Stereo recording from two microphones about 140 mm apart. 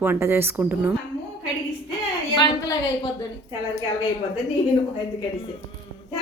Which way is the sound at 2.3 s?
35° left (ahead or behind).